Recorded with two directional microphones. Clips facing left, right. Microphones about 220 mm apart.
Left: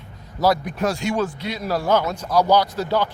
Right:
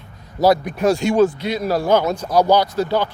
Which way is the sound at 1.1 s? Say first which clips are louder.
Right 8 dB; 20° right (ahead or behind).